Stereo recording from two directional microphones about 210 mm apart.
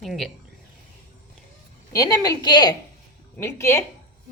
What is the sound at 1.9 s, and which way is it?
A woman's voice, 15° left (ahead or behind).